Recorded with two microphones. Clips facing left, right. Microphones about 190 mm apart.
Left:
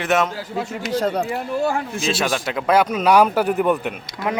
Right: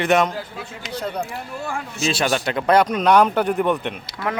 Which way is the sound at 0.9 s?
90° left.